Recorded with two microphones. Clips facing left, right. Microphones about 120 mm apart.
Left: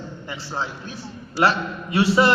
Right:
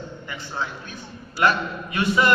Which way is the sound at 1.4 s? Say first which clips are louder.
Left 1 dB; 30° left (ahead or behind).